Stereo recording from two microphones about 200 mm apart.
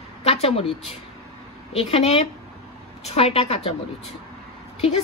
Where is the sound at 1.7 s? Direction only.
30° left (ahead or behind).